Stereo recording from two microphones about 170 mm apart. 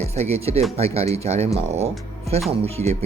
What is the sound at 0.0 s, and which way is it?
Speech, 40° right (ahead or behind).